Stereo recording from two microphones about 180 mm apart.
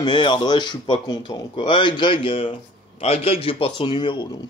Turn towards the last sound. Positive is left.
turn(degrees=25)  # may be behind; listen again after turning